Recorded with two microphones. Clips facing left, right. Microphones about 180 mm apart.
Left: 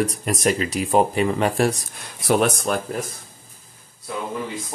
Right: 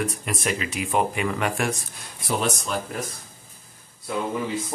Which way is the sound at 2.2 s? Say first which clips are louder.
Left 7 dB; 60° left (ahead or behind).